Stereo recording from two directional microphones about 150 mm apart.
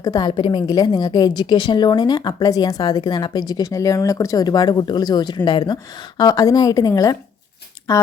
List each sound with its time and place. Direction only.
0.0 s speech: 25° left (ahead or behind)